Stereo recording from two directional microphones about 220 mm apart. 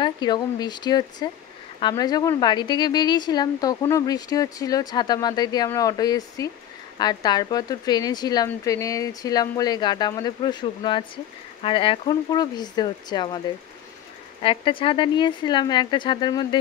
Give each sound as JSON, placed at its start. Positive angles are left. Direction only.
{"t": 0.0, "sound": "a woman's voice", "side_deg": 20}
{"t": 14.4, "sound": "speech", "side_deg": 25}